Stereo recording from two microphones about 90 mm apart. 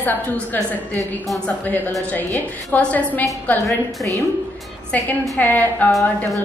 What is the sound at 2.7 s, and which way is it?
Speech, 20° left (ahead or behind).